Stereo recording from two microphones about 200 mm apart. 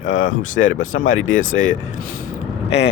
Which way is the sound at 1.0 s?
75° left (ahead or behind).